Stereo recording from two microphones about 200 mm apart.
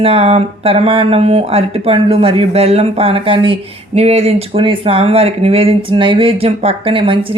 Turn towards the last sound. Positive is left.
turn(degrees=-25)  # may be behind; listen again after turning